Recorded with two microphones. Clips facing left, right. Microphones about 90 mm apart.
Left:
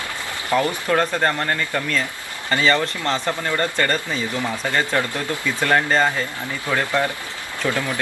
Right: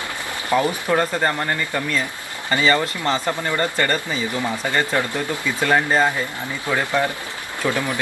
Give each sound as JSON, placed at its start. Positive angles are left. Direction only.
{"t": 0.5, "sound": "speech", "side_deg": -15}
{"t": 0.9, "sound": "speech", "side_deg": -5}